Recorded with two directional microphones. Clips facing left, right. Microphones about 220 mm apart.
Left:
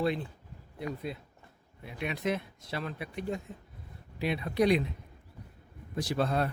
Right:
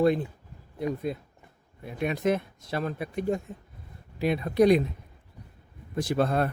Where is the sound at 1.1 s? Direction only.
45° right (ahead or behind).